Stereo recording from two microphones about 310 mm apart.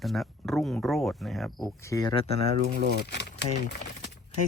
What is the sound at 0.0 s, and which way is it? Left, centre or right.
Speech, centre.